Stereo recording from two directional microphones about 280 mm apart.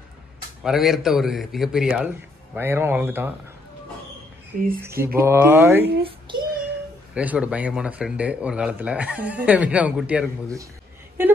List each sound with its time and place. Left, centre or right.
0.7 s speech: centre
4.8 s speech: centre
6.0 s child singing: centre
7.2 s speech: centre
11.2 s a sound: centre